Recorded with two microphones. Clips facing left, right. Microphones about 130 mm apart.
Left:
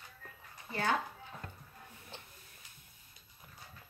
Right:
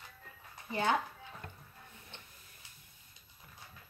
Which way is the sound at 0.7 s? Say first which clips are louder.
Right 2 dB; 20° right (ahead or behind).